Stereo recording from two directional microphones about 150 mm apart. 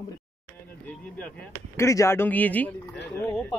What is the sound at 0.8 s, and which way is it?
Speech, 10° left (ahead or behind).